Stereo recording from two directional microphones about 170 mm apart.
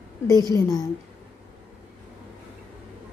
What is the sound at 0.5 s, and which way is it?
Speech, 20° left (ahead or behind).